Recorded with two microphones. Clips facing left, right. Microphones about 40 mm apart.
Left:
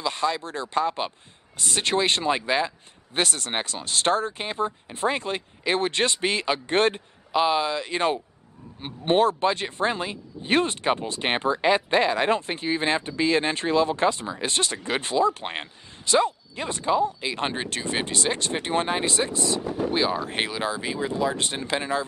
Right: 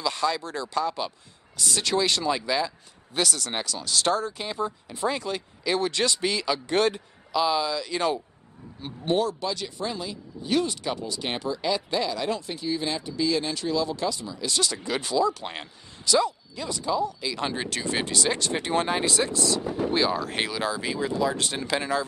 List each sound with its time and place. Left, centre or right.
0.0 s speech: left
19.9 s speech: centre